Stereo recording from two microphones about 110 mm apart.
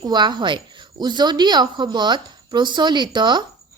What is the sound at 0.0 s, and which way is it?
A woman's voice, 40° right (ahead or behind).